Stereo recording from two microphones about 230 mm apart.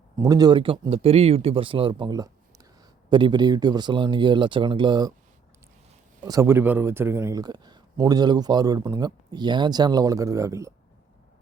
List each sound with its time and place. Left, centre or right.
0.2 s speech: centre
6.2 s speech: centre